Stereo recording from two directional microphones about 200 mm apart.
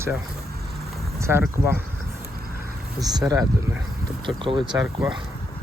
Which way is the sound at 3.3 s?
15° right (ahead or behind).